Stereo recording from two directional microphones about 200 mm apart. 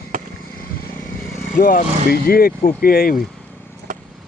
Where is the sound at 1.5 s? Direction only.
45° left (ahead or behind).